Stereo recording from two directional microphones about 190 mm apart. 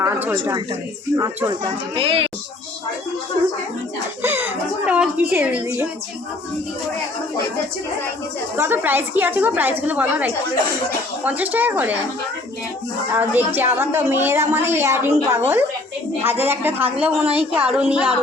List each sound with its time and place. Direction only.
0.0 s speech: 15° right (ahead or behind)
2.0 s speech: 30° right (ahead or behind)
4.2 s speech: 10° right (ahead or behind)
8.5 s speech: 10° right (ahead or behind)
13.1 s speech: 10° right (ahead or behind)